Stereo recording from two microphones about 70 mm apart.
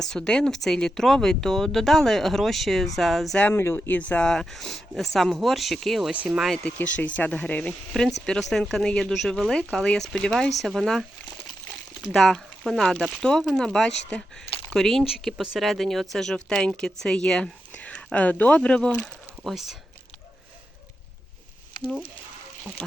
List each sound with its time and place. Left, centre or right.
0.0 s speech: centre
3.5 s speech: left
4.3 s speech: centre
6.1 s speech: centre
6.6 s speech: left; by 11.0 s centre
12.1 s speech: centre
19.5 s speech: centre